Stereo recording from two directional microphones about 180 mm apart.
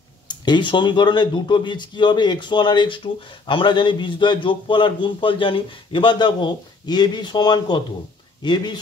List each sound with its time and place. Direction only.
0.3 s a man's voice: 25° left (ahead or behind)